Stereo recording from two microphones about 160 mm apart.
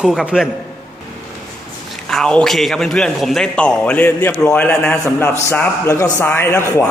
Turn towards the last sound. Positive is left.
turn(degrees=15)  # may be behind; listen again after turning